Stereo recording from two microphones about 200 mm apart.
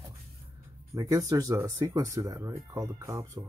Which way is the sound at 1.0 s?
15° right (ahead or behind).